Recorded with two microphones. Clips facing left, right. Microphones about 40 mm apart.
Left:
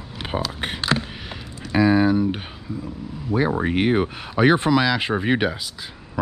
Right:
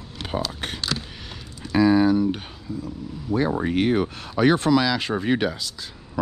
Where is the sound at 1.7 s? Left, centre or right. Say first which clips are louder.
Even; centre.